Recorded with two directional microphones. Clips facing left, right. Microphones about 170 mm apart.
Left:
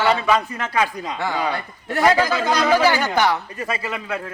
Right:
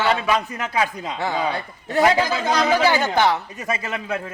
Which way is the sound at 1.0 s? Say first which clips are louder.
Even; 25° right (ahead or behind).